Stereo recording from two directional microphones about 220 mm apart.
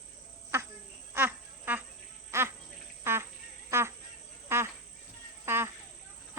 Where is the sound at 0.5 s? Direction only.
10° right (ahead or behind).